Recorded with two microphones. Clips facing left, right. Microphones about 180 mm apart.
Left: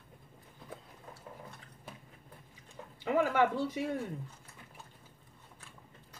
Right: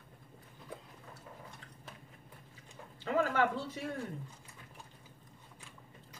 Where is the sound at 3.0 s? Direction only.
15° left (ahead or behind).